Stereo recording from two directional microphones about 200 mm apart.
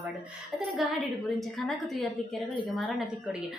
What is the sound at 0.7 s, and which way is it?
A woman's voice, centre (ahead or behind).